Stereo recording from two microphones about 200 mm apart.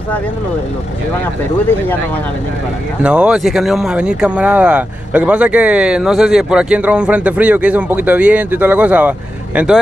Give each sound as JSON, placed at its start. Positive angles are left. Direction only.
{"t": 3.0, "sound": "speech", "side_deg": -5}